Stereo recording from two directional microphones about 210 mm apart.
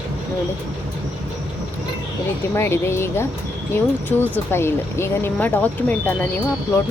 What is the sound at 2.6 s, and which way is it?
Speech, 10° left (ahead or behind).